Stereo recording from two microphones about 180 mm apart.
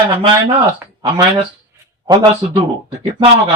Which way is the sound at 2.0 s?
25° right (ahead or behind).